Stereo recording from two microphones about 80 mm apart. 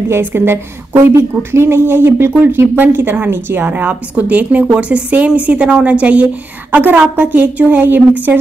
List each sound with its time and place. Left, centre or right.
0.1 s a woman's voice: right